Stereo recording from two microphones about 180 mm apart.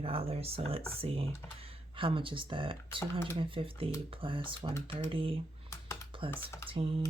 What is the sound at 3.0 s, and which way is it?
Speech, 15° left (ahead or behind).